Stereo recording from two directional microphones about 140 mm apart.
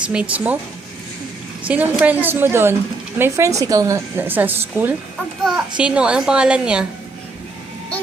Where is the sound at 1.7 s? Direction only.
10° right (ahead or behind).